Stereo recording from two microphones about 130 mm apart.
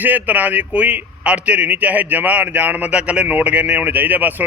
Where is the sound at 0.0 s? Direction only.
15° right (ahead or behind).